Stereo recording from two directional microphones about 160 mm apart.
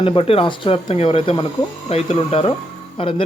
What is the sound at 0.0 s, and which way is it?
Speech, 35° left (ahead or behind).